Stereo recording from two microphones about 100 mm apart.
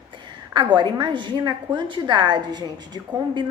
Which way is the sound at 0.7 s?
50° right (ahead or behind).